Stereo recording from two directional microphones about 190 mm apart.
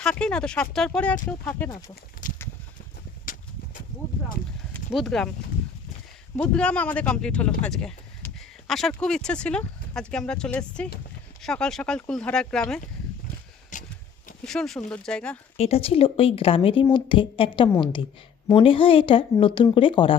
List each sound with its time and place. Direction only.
0.0 s speech: 5° left (ahead or behind)
2.2 s a sound: 45° left (ahead or behind)
4.9 s speech: centre (ahead or behind)
6.3 s speech: 5° left (ahead or behind)
13.7 s a sound: 40° left (ahead or behind)
14.4 s speech: centre (ahead or behind)
15.5 s speech: 35° left (ahead or behind)